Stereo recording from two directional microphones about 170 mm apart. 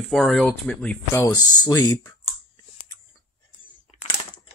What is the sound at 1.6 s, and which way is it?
Speech, 25° left (ahead or behind).